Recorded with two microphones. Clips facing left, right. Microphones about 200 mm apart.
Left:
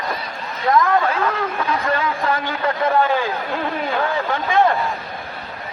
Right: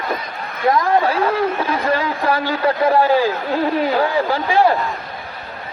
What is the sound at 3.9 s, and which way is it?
Speech, 35° right (ahead or behind).